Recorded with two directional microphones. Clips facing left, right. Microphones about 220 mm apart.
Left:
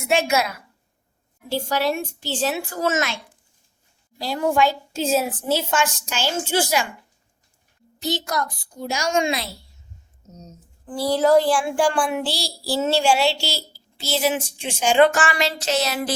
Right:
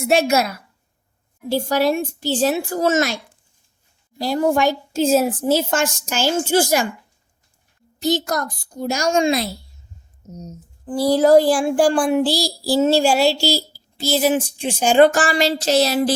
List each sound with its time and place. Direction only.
0.1 s child singing: 40° right (ahead or behind)
4.2 s a woman's voice: 45° right (ahead or behind)
8.0 s a woman's voice: 45° right (ahead or behind)
10.2 s speech: 10° right (ahead or behind)
11.0 s child singing: 40° right (ahead or behind)